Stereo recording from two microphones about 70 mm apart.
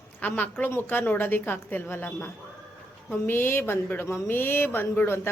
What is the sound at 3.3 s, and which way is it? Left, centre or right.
Speech, left.